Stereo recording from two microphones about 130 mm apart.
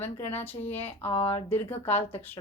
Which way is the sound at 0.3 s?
15° left (ahead or behind).